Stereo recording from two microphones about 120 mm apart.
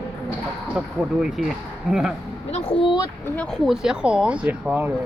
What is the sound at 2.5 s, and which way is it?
Speech, 50° left (ahead or behind).